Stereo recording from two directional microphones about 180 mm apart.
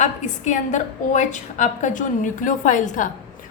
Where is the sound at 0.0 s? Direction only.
40° left (ahead or behind).